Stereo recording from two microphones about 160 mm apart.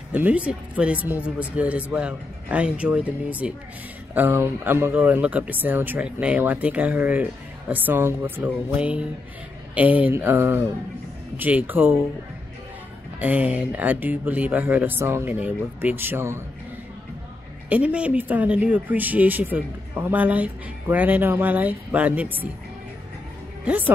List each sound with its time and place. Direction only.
0.1 s speech: 10° right (ahead or behind)
13.2 s speech: 10° right (ahead or behind)
17.6 s speech: 10° right (ahead or behind)